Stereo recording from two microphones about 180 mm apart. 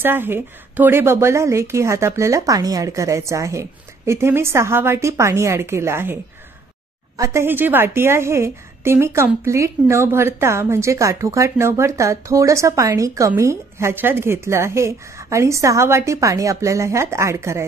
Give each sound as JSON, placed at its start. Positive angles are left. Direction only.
{"t": 0.0, "sound": "a woman's voice", "side_deg": -10}
{"t": 7.2, "sound": "a woman's voice", "side_deg": -15}